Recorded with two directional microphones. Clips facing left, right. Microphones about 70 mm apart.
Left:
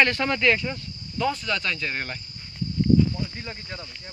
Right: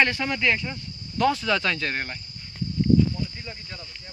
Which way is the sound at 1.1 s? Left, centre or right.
Right.